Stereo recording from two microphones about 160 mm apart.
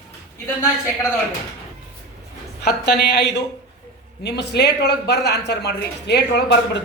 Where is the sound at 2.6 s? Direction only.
90° left.